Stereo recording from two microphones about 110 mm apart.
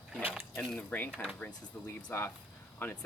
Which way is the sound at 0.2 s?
20° right (ahead or behind).